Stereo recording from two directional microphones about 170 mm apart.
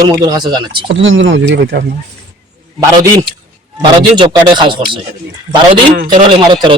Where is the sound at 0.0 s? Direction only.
25° right (ahead or behind).